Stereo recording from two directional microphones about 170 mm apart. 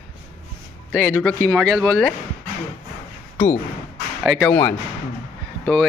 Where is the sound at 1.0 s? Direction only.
10° left (ahead or behind).